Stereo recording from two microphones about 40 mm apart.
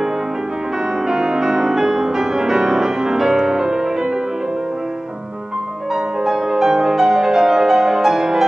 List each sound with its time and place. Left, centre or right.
1.0 s music: centre
6.2 s music: centre